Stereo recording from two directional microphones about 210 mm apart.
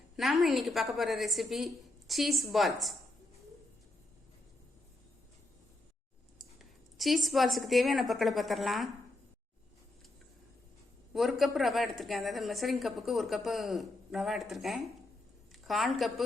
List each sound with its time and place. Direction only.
0.2 s a woman's voice: centre (ahead or behind)
6.4 s a woman's voice: centre (ahead or behind)
11.1 s a woman's voice: centre (ahead or behind)